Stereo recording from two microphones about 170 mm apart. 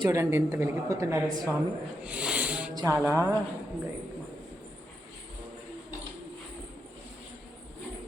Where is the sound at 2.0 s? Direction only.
5° right (ahead or behind).